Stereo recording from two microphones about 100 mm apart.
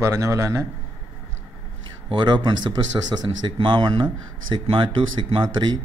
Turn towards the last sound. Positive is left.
turn(degrees=-50)  # may be behind; listen again after turning